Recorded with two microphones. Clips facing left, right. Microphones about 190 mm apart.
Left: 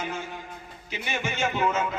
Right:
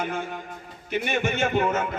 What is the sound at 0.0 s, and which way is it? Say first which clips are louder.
A man's voice: right 4 dB; 55° right (ahead or behind).